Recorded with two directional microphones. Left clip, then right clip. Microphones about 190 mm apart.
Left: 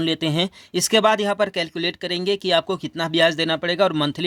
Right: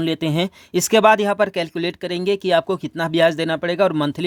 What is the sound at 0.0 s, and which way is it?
Speech, 20° right (ahead or behind).